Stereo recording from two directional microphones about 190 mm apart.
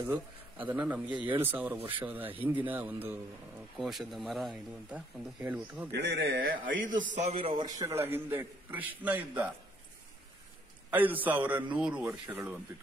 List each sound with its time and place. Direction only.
0.0 s a man's voice: 10° right (ahead or behind)
5.9 s speech: 65° right (ahead or behind)
6.5 s a man's voice: 45° right (ahead or behind); by 7.9 s 25° right (ahead or behind)
8.0 s a man's voice: 10° right (ahead or behind)
10.9 s a man's voice: 10° right (ahead or behind)